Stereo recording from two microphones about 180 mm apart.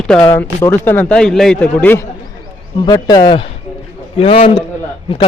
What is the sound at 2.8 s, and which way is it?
A man's voice, 20° left (ahead or behind).